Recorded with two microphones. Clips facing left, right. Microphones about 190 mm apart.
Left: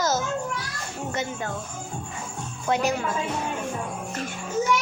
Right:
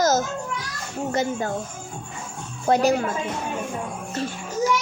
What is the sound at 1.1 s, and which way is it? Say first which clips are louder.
Speech: right 7 dB; 35° right (ahead or behind).